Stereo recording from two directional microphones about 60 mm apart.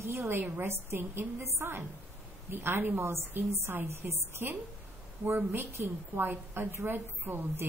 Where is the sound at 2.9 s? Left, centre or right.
Right.